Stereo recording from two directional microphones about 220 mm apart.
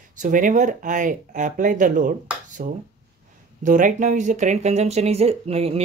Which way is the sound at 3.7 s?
35° right (ahead or behind).